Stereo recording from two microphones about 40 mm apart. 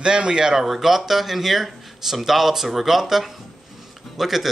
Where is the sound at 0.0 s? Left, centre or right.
Right.